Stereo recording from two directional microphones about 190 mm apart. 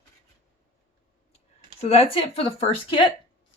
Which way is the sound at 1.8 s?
35° left (ahead or behind).